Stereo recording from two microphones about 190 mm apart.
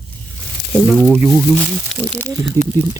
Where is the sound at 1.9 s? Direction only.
Centre (ahead or behind).